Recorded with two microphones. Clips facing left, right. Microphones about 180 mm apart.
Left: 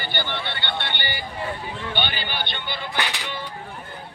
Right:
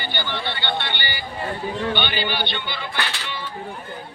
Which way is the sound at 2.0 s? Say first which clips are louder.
Right 3 dB; 45° left (ahead or behind).